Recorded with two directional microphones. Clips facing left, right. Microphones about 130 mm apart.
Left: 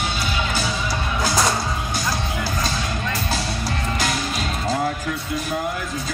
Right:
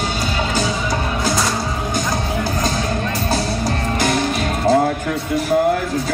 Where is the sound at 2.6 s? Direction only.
50° right (ahead or behind).